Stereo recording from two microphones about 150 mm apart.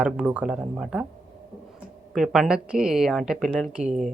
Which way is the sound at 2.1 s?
Centre (ahead or behind).